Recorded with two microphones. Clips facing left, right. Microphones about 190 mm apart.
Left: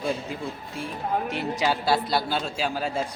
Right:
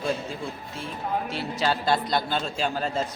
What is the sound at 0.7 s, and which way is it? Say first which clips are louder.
A woman's voice: left 2 dB; 15° left (ahead or behind).